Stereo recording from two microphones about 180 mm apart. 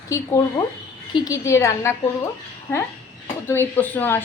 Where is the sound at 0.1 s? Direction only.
15° left (ahead or behind).